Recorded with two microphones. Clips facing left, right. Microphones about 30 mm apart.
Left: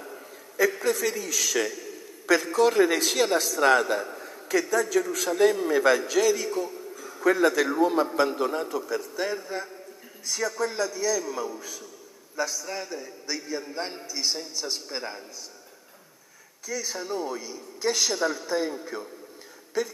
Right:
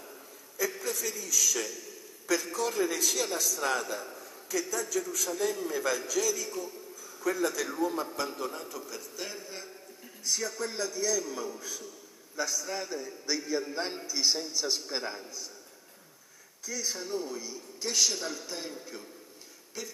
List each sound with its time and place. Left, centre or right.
0.8 s a man's voice: left
10.2 s a man's voice: centre
16.6 s a man's voice: centre; by 19.0 s left